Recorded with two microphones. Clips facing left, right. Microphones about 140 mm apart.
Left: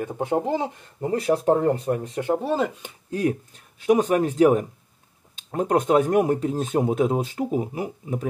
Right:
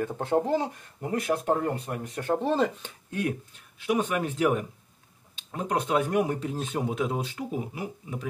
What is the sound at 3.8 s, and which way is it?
Speech, 40° left (ahead or behind).